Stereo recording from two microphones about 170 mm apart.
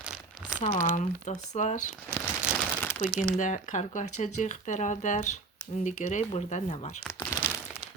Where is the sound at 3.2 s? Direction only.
45° left (ahead or behind).